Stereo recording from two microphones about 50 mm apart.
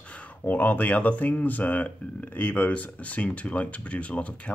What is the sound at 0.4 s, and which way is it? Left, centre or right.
Speech, left.